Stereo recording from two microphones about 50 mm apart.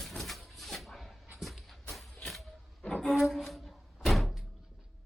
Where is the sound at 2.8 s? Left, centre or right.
Centre.